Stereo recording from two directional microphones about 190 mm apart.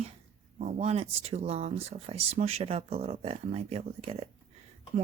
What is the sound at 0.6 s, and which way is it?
Speech, 35° right (ahead or behind).